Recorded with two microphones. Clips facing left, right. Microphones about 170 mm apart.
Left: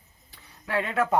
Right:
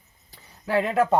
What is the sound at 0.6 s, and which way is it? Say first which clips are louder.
Speech: right 5 dB; 35° right (ahead or behind).